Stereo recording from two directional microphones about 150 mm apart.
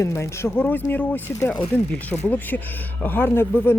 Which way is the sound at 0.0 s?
20° left (ahead or behind).